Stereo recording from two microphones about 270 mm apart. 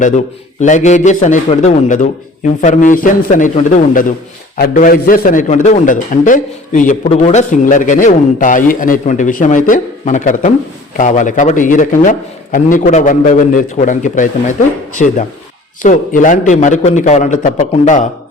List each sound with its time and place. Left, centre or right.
0.6 s a man's voice: left